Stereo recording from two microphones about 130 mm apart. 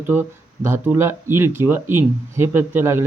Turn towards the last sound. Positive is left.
turn(degrees=-20)  # may be behind; listen again after turning